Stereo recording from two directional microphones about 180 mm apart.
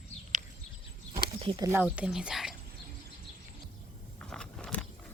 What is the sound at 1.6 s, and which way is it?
Speech, 10° right (ahead or behind).